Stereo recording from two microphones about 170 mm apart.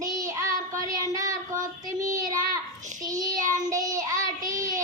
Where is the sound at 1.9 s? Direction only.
20° right (ahead or behind).